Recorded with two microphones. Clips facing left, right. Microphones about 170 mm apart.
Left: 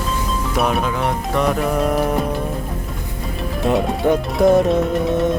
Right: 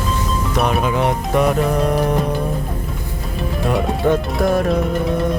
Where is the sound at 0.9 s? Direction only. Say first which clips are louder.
Right 3 dB; 20° right (ahead or behind).